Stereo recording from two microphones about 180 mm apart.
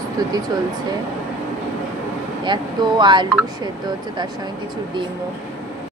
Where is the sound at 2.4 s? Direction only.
25° right (ahead or behind).